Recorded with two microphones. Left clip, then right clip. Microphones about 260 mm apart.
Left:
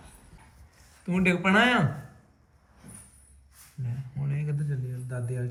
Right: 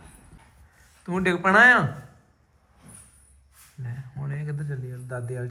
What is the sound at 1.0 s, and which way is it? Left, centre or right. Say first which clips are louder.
Speech: right 3 dB; centre.